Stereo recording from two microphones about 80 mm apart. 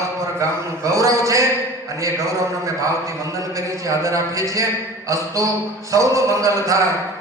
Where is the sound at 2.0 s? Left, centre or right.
Right.